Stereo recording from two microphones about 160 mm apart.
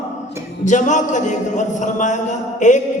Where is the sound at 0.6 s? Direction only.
50° left (ahead or behind).